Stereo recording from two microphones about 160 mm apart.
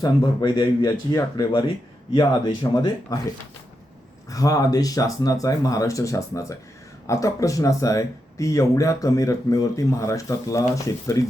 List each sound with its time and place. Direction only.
0.0 s speech: 25° left (ahead or behind)
2.7 s speech: 25° left (ahead or behind)
4.3 s speech: 20° left (ahead or behind)